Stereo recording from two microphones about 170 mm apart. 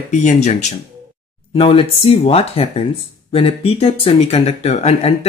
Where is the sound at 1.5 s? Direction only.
30° left (ahead or behind).